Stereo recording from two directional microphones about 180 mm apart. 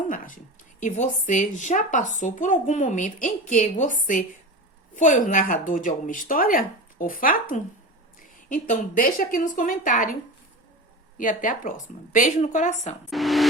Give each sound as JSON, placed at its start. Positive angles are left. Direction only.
{"t": 0.8, "sound": "a woman's voice", "side_deg": 45}
{"t": 11.2, "sound": "a woman's voice", "side_deg": 45}
{"t": 13.1, "sound": "a sound", "side_deg": 0}